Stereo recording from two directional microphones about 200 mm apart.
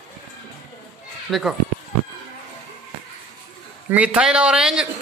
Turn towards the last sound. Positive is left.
turn(degrees=0)  # may be behind; listen again after turning